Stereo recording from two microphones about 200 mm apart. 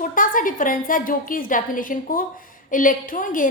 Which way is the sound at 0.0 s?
40° left (ahead or behind).